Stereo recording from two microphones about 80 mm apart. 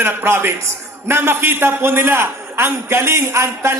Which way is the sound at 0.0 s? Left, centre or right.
Right.